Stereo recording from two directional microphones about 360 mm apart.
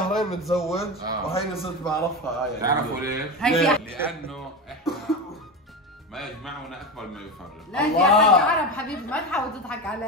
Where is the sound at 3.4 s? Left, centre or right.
Centre.